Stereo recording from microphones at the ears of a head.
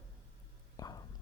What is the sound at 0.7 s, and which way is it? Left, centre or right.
Whispering, left.